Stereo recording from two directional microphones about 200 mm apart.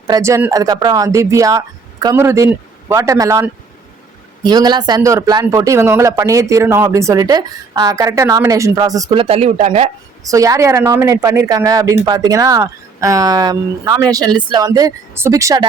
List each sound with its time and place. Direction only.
0.1 s speech: 15° right (ahead or behind); by 9.9 s 35° right (ahead or behind)
10.2 s speech: 15° right (ahead or behind)